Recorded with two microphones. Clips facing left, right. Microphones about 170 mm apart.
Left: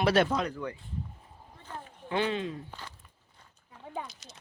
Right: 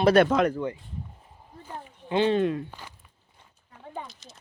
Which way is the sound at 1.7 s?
25° right (ahead or behind).